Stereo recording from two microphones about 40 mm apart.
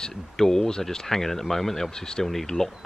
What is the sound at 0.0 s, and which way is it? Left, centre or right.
Speech, centre.